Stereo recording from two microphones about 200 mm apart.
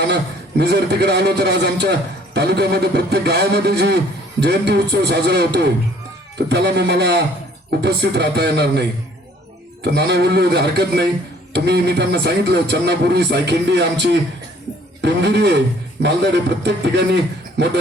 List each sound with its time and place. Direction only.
0.1 s a man's voice: 55° right (ahead or behind)
9.8 s a man's voice: 55° right (ahead or behind)